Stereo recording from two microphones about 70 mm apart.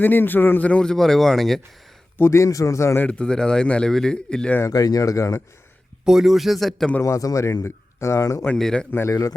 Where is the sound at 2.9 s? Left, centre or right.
Left.